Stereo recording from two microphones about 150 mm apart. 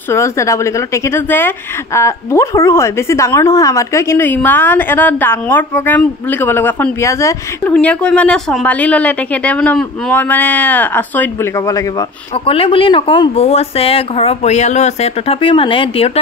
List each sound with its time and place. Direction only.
0.1 s a woman's voice: 20° left (ahead or behind)
7.7 s a woman's voice: 5° left (ahead or behind)
12.4 s speech: 35° left (ahead or behind)